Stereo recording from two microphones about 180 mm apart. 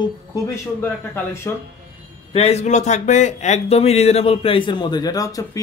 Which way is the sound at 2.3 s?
35° left (ahead or behind).